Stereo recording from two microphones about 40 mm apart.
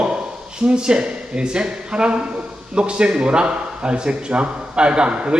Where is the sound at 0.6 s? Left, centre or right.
Right.